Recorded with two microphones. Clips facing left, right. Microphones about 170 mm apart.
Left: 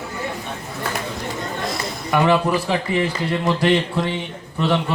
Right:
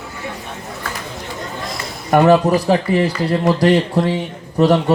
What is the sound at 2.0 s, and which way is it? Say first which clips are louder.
Speech: right 6 dB; 45° right (ahead or behind).